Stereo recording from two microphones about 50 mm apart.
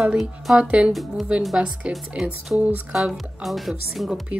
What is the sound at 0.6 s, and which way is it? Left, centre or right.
Speech, right.